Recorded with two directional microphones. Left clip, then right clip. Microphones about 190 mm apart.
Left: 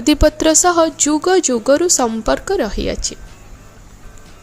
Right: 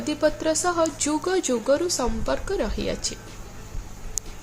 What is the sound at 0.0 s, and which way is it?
Speech, 50° left (ahead or behind).